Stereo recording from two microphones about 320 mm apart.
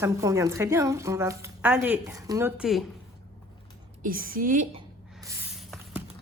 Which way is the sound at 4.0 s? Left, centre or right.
Right.